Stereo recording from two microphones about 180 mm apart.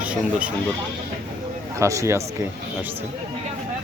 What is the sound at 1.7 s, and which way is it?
Speech, 15° right (ahead or behind).